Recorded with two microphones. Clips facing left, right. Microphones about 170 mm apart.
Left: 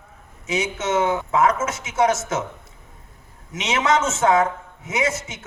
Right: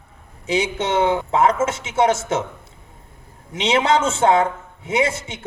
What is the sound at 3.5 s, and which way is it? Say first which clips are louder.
A man's voice: right 3 dB; 30° right (ahead or behind).